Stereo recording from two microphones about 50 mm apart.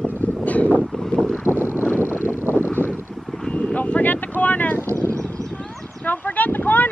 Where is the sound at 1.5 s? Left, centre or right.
Right.